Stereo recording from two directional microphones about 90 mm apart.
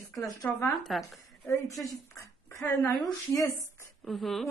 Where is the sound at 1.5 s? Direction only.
40° left (ahead or behind).